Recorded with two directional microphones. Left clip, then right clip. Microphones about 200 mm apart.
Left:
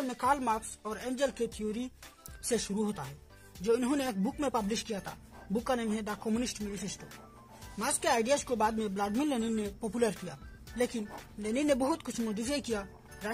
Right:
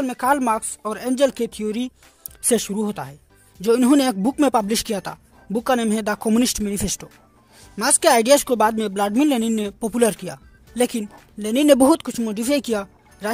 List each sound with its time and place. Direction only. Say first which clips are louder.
0.0 s speech: right 10 dB; 50° right (ahead or behind)
2.4 s speech: right 11 dB; 40° right (ahead or behind)